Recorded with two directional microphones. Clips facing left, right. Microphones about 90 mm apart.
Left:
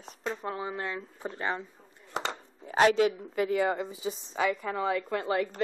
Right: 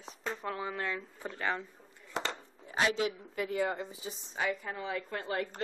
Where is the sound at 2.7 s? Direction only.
50° left (ahead or behind).